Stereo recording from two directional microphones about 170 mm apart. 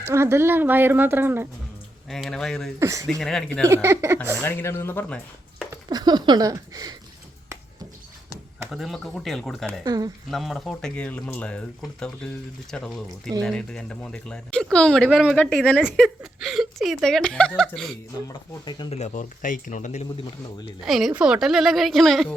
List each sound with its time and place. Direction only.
0.0 s speech: 15° right (ahead or behind)
2.0 s speech: centre (ahead or behind)
2.7 s speech: 20° right (ahead or behind)
3.1 s speech: 5° left (ahead or behind)
3.7 s speech: 15° right (ahead or behind)
4.4 s speech: 15° left (ahead or behind)
5.7 s speech: 25° right (ahead or behind)
8.7 s speech: centre (ahead or behind)
9.8 s speech: 20° right (ahead or behind)
10.3 s speech: centre (ahead or behind)
18.3 s speech: 25° left (ahead or behind)
18.9 s speech: 45° left (ahead or behind)
20.8 s speech: centre (ahead or behind)